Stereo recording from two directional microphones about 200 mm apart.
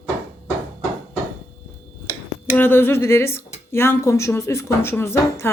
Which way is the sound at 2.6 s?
10° left (ahead or behind).